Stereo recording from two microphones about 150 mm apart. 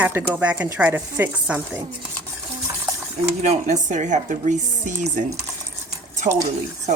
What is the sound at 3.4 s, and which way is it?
Speech, 50° right (ahead or behind).